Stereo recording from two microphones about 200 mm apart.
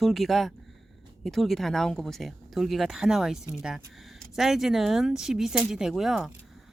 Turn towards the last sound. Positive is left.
turn(degrees=0)  # may be behind; listen again after turning